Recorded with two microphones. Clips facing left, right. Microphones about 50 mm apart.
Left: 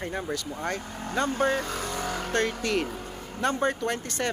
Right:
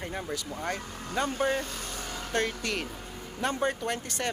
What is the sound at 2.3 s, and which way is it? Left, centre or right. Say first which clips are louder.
Speech: left 2 dB; centre.